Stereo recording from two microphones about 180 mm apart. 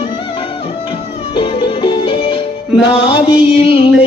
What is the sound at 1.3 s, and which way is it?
Music, 30° left (ahead or behind).